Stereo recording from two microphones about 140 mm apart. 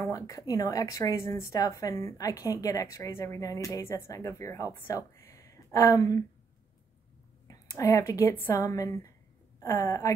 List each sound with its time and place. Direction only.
0.1 s speech: 25° left (ahead or behind)
7.4 s speech: 25° left (ahead or behind)